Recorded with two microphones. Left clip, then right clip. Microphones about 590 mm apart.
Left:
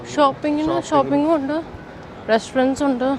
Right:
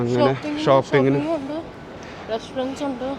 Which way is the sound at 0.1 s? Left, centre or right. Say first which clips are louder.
Left 6 dB; left.